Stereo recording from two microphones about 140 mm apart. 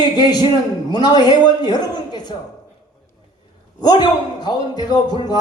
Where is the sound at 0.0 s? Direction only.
30° left (ahead or behind).